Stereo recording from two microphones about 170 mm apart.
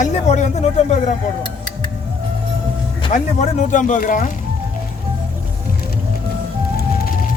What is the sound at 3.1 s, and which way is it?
Speech, 45° left (ahead or behind).